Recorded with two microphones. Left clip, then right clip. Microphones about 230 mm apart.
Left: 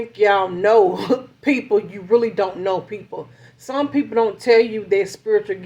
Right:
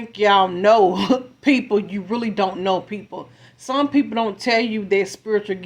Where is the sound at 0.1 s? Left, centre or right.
Right.